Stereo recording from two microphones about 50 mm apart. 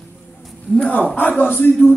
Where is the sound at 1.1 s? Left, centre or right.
Left.